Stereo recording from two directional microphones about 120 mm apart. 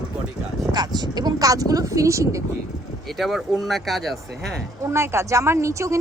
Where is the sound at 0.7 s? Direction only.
35° right (ahead or behind).